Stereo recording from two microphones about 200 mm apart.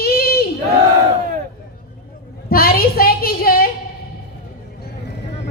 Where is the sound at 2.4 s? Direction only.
50° left (ahead or behind).